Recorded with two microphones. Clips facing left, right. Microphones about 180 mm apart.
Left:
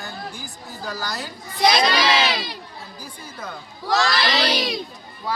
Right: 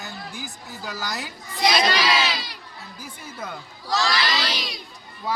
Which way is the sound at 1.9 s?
60° left (ahead or behind).